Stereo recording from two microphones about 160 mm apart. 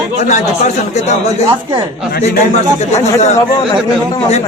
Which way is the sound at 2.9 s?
45° left (ahead or behind).